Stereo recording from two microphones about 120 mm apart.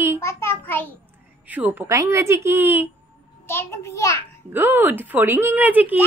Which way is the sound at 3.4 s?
20° left (ahead or behind).